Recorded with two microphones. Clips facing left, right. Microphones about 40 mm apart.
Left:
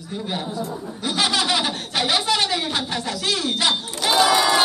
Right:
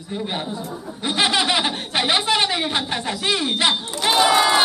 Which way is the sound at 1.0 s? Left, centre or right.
Right.